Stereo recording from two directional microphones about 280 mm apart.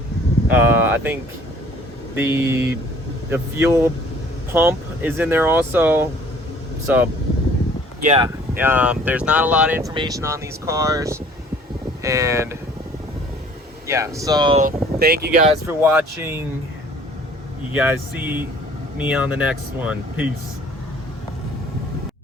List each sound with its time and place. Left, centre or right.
0.5 s speech: centre
2.1 s speech: centre
8.0 s speech: right
8.5 s speech: centre
13.8 s speech: centre
14.6 s speech: right
15.6 s speech: centre
17.7 s speech: centre